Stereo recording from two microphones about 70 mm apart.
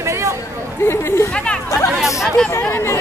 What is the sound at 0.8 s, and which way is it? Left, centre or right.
Chatter, left.